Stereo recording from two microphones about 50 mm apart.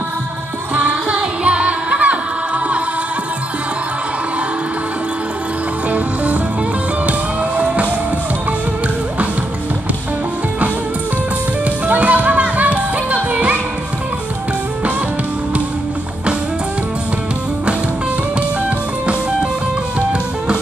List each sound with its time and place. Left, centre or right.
0.7 s music: right
5.9 s music: right
11.9 s music: right